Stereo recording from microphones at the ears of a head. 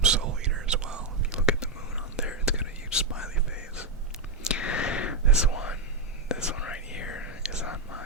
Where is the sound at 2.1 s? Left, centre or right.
Left.